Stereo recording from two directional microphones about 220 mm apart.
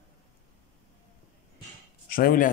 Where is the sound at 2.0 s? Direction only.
40° left (ahead or behind).